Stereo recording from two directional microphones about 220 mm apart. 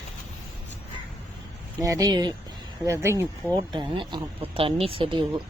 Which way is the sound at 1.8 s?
15° right (ahead or behind).